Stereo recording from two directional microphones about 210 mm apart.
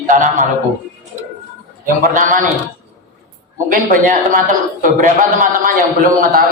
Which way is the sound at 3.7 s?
40° right (ahead or behind).